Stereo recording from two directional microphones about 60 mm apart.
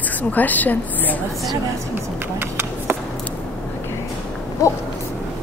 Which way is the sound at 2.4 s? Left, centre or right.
Right.